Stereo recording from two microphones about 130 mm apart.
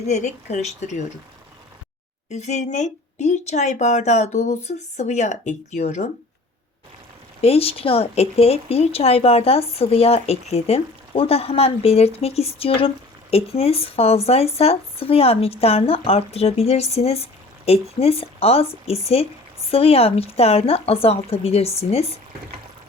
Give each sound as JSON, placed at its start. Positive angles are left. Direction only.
{"t": 0.1, "sound": "speech", "side_deg": 65}
{"t": 2.3, "sound": "speech", "side_deg": 65}
{"t": 7.4, "sound": "speech", "side_deg": 50}